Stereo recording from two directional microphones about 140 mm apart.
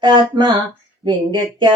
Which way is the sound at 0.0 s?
35° right (ahead or behind).